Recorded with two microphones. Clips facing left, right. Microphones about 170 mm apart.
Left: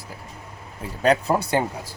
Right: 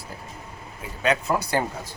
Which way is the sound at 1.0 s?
35° left (ahead or behind).